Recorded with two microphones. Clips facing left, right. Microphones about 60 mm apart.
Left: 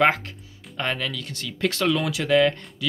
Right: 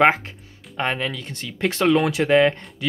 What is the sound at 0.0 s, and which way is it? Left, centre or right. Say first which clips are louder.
Speech: right 3 dB; right.